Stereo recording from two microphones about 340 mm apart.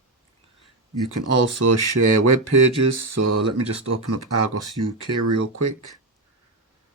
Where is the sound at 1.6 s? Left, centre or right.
Right.